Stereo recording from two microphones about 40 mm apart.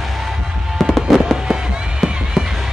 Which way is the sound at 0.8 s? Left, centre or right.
Centre.